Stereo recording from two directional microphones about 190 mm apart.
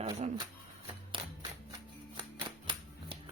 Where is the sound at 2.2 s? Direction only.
25° right (ahead or behind).